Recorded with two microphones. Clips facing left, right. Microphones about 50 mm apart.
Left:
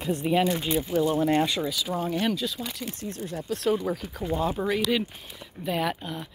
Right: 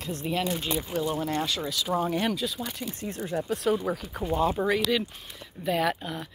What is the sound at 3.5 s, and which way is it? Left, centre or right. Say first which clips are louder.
Speech: left 2 dB; centre.